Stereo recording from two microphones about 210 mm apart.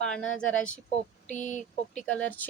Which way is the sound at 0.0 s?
5° left (ahead or behind).